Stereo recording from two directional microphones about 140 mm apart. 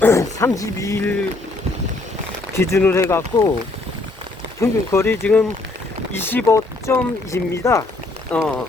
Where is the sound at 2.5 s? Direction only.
20° left (ahead or behind).